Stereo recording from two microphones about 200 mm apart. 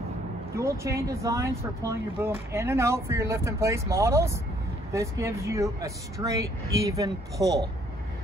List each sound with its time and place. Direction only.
0.6 s speech: 15° right (ahead or behind)